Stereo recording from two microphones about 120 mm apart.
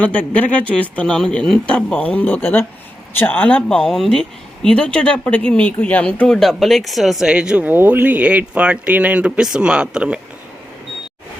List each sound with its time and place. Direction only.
0.0 s speech: 10° left (ahead or behind); by 10.2 s 10° right (ahead or behind)